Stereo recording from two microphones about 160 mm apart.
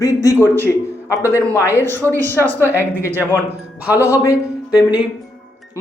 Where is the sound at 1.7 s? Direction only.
15° left (ahead or behind).